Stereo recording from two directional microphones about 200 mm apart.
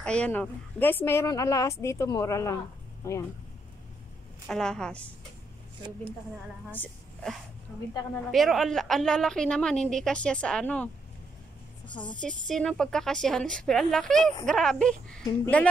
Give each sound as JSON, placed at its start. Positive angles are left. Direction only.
{"t": 0.0, "sound": "a woman's voice", "side_deg": 5}
{"t": 4.5, "sound": "a woman's voice", "side_deg": 5}
{"t": 6.7, "sound": "a woman's voice", "side_deg": 5}
{"t": 11.9, "sound": "a woman's voice", "side_deg": 25}
{"t": 12.2, "sound": "a woman's voice", "side_deg": 5}